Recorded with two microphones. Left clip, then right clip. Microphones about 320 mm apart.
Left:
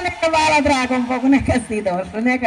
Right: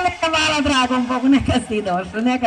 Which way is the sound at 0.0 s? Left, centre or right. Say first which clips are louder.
Left 1 dB; centre.